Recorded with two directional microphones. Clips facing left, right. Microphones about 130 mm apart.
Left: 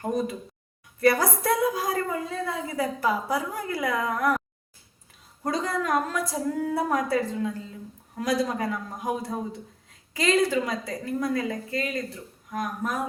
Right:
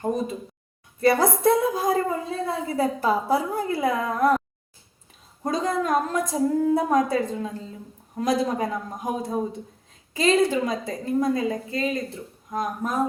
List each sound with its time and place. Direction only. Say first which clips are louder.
1.0 s a woman's voice: right 3 dB; 25° right (ahead or behind)
5.4 s a woman's voice: right 3 dB; 20° right (ahead or behind)